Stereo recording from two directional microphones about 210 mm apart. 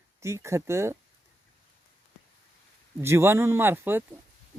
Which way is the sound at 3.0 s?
10° right (ahead or behind).